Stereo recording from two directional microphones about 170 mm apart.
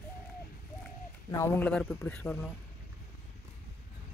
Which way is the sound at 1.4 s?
10° left (ahead or behind).